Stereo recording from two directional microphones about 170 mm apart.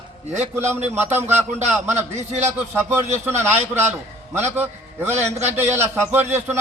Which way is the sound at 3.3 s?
15° right (ahead or behind).